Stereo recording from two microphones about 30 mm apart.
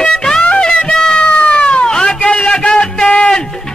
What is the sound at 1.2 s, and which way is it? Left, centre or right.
Cat, left.